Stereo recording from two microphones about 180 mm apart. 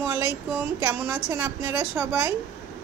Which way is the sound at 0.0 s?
15° right (ahead or behind).